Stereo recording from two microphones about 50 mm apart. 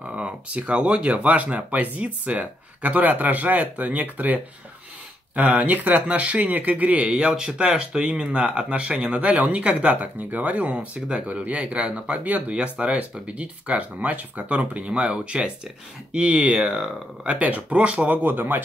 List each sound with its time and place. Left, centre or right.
0.0 s speech: right
17.4 s speech: right
18.2 s speech: right